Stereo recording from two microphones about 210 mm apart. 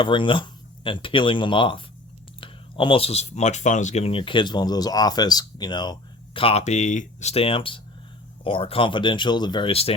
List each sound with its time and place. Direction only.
0.0 s speech: 25° left (ahead or behind)